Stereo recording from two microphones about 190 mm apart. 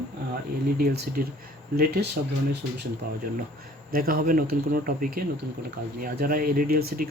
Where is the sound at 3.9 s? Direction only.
50° right (ahead or behind).